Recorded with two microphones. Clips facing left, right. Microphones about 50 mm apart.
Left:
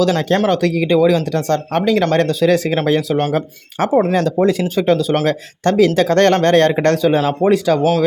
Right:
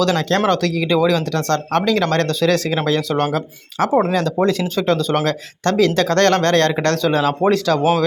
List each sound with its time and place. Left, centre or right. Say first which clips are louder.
0.0 s speech: left 2 dB; centre
4.4 s speech: left 3 dB; centre
7.8 s speech: left 1 dB; centre